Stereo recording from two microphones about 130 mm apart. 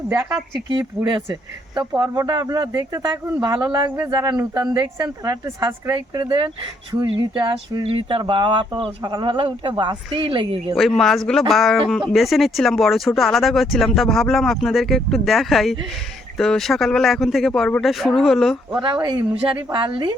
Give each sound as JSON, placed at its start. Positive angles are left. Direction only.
{"t": 0.2, "sound": "speech", "side_deg": -5}
{"t": 0.7, "sound": "speech", "side_deg": -35}
{"t": 10.8, "sound": "speech", "side_deg": 0}
{"t": 19.7, "sound": "speech", "side_deg": -40}